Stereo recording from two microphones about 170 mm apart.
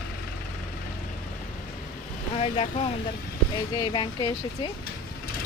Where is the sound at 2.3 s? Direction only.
35° left (ahead or behind).